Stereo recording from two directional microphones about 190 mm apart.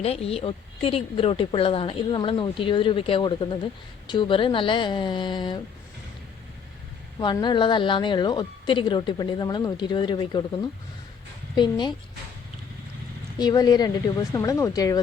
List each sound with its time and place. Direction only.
0.0 s a woman's voice: 30° left (ahead or behind)
7.2 s a woman's voice: 25° left (ahead or behind)
13.4 s a woman's voice: 20° left (ahead or behind)